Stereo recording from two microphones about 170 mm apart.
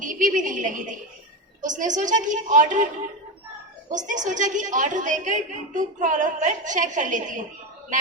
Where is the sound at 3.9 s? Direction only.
45° right (ahead or behind).